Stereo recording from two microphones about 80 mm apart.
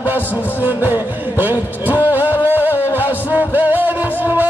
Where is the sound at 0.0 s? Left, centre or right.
Right.